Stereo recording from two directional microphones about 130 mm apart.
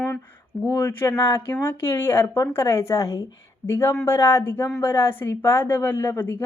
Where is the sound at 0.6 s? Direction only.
20° left (ahead or behind).